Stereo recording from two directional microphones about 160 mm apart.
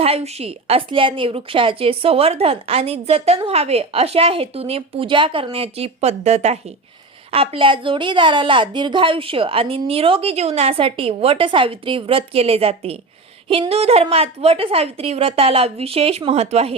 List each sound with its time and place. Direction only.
0.0 s a woman's voice: 40° right (ahead or behind)